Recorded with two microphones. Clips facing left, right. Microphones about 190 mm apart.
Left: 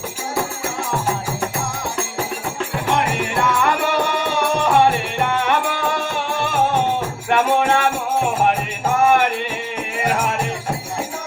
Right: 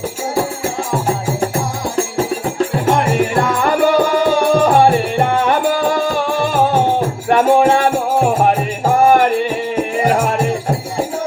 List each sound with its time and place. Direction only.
1.0 s music: 35° right (ahead or behind)